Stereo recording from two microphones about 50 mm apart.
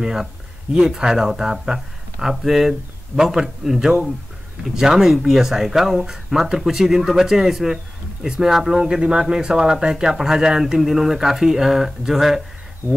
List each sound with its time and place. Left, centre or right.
0.0 s speech: centre